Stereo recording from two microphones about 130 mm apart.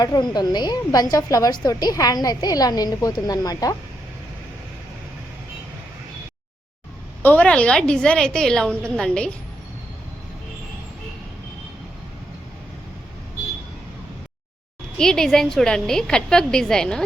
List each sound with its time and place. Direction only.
0.0 s a woman's voice: 30° left (ahead or behind)
7.2 s a woman's voice: 15° left (ahead or behind)
14.9 s a woman's voice: 5° left (ahead or behind)